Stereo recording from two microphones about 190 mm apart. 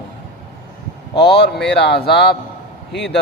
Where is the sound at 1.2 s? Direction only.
60° left (ahead or behind).